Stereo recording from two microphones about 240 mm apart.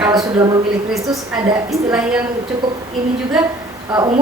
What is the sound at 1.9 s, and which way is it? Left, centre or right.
Speech, centre.